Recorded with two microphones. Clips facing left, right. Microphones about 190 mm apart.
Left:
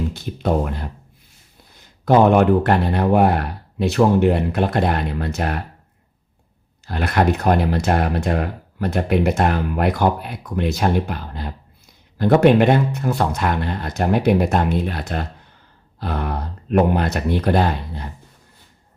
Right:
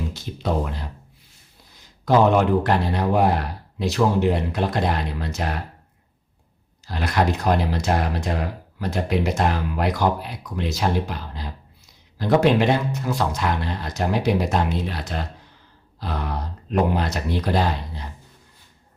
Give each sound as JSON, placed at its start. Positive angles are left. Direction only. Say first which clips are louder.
{"t": 0.1, "sound": "speech", "louder": "left 4 dB", "side_deg": 55}
{"t": 6.8, "sound": "speech", "louder": "left 3 dB", "side_deg": 55}